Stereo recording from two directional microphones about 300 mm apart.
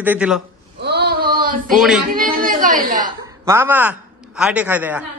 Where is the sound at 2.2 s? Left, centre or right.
Right.